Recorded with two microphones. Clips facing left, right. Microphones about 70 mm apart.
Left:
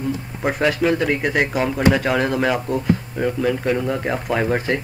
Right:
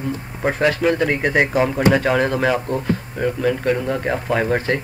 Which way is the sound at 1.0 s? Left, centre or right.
Centre.